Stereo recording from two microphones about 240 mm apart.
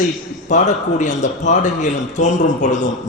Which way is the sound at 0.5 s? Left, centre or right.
Left.